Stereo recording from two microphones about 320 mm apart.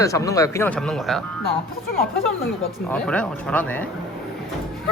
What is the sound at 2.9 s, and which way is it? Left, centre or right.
Speech, centre.